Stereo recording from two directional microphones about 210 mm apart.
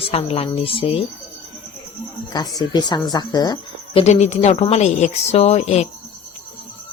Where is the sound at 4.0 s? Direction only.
30° left (ahead or behind).